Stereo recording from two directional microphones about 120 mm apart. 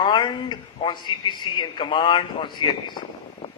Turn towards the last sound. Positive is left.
turn(degrees=40)  # may be behind; listen again after turning